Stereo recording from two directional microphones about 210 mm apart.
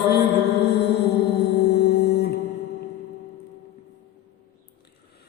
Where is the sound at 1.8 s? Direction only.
50° left (ahead or behind).